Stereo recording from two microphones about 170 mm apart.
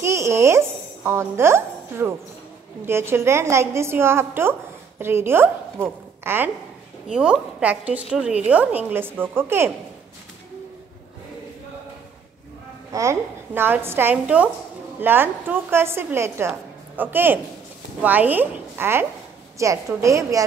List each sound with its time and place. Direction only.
0.0 s music: 15° right (ahead or behind)
2.8 s a woman's voice: 15° right (ahead or behind)
12.9 s a woman's voice: 15° right (ahead or behind)